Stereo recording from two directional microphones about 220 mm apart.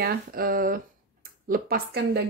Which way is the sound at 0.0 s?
45° right (ahead or behind).